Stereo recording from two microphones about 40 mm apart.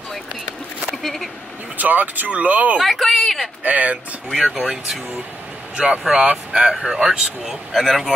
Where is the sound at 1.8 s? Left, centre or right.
Right.